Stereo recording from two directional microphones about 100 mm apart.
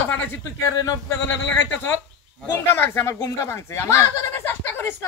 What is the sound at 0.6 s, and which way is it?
Speech, 40° left (ahead or behind).